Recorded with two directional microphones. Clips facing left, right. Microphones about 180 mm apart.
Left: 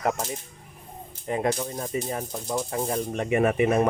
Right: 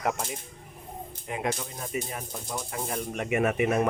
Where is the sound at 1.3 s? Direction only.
35° left (ahead or behind).